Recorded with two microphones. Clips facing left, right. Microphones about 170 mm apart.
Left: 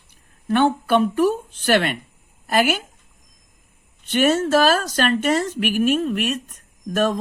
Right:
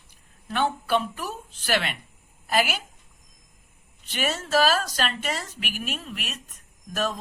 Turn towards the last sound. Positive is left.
turn(degrees=50)  # may be behind; listen again after turning